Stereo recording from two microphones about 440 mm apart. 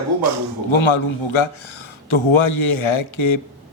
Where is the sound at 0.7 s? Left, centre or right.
Left.